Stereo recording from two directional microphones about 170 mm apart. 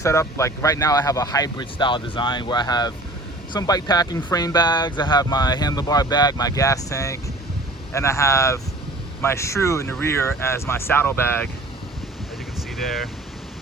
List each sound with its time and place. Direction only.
0.0 s speech: 15° left (ahead or behind)
12.7 s speech: centre (ahead or behind)